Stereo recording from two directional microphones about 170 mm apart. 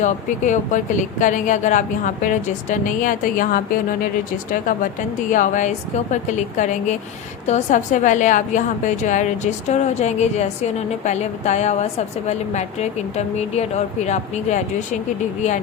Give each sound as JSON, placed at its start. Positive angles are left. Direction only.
{"t": 0.0, "sound": "a woman's voice", "side_deg": 45}
{"t": 5.3, "sound": "a woman's voice", "side_deg": 45}